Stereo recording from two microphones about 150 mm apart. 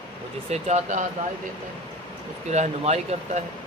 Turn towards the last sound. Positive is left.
turn(degrees=-45)  # may be behind; listen again after turning